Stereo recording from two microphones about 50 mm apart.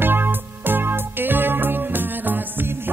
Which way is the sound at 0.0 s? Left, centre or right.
Right.